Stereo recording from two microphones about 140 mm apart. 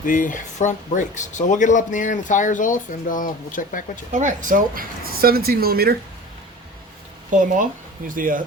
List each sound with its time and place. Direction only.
0.0 s speech: 70° left (ahead or behind)
4.1 s speech: 65° right (ahead or behind); by 6.0 s 90° right
7.3 s speech: 65° right (ahead or behind)